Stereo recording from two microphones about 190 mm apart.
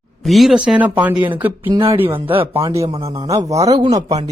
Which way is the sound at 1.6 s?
25° right (ahead or behind).